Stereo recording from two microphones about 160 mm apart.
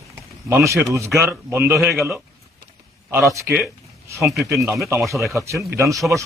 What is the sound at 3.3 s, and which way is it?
Speech, 20° right (ahead or behind).